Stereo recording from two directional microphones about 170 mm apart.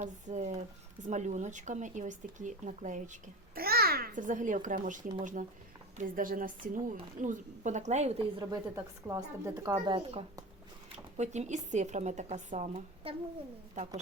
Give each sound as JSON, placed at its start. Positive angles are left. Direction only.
{"t": 0.0, "sound": "speech", "side_deg": -45}
{"t": 8.4, "sound": "a woman's voice", "side_deg": -25}
{"t": 11.2, "sound": "speech", "side_deg": -45}